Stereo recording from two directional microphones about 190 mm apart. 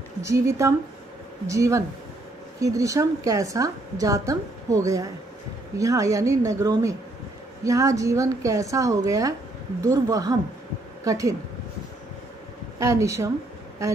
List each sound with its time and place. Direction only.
0.2 s a woman's voice: 15° right (ahead or behind)
12.7 s a woman's voice: 15° right (ahead or behind)